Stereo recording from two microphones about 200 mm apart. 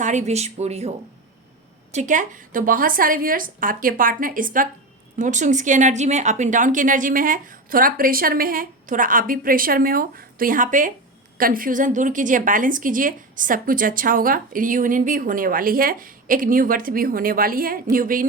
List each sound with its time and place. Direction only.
0.0 s a woman's voice: 35° right (ahead or behind)